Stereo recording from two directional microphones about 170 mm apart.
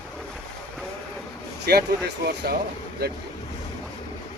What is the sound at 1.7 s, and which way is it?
Speech, 70° right (ahead or behind).